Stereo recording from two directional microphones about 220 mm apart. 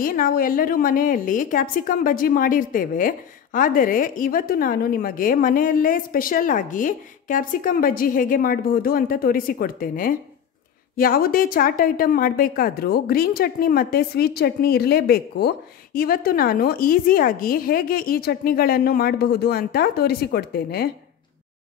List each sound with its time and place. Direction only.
0.0 s a woman's voice: 40° left (ahead or behind)